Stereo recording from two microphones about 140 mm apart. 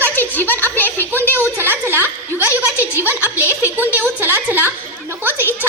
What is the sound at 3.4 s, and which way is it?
Speech, 20° left (ahead or behind).